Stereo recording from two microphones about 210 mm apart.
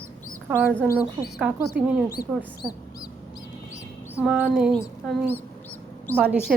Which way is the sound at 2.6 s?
20° left (ahead or behind).